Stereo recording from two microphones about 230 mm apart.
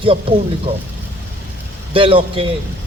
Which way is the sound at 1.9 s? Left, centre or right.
Right.